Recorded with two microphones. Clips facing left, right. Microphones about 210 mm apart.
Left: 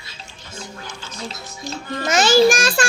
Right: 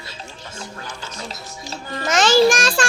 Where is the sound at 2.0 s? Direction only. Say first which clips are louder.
Even; 5° left (ahead or behind).